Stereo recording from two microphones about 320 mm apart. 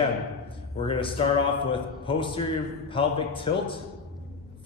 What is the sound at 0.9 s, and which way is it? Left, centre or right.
A man's voice, centre.